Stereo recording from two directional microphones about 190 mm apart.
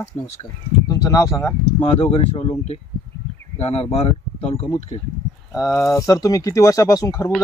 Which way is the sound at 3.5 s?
30° left (ahead or behind).